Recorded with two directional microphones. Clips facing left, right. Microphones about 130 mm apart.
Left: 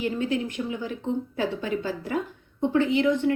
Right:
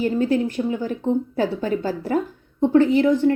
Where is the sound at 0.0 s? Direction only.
40° right (ahead or behind).